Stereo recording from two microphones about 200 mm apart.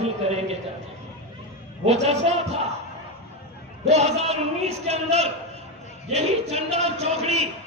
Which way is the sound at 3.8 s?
30° right (ahead or behind).